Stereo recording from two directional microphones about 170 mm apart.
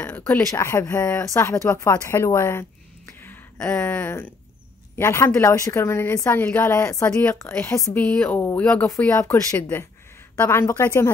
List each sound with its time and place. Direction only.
0.0 s a woman's voice: 10° left (ahead or behind)